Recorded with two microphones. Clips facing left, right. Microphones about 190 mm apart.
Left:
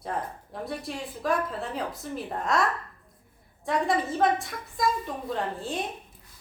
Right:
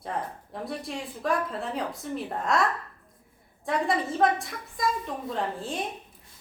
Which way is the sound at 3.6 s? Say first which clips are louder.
Left 1 dB; centre (ahead or behind).